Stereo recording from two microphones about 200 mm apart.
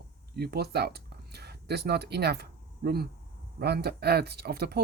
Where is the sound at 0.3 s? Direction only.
55° right (ahead or behind).